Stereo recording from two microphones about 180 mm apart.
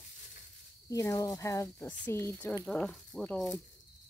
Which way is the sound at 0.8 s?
20° left (ahead or behind).